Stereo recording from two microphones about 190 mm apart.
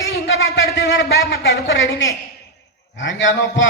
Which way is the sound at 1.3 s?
80° left.